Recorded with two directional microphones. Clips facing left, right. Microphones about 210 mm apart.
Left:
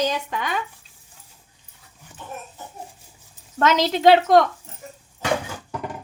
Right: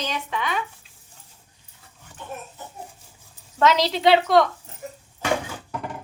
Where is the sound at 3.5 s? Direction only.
50° left (ahead or behind).